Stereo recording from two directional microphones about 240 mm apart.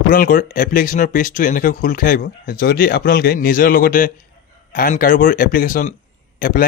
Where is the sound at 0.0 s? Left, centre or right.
Left.